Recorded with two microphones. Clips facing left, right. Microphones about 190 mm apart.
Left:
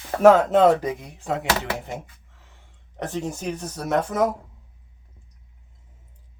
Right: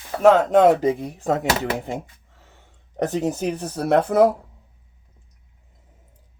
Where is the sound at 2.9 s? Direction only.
35° right (ahead or behind).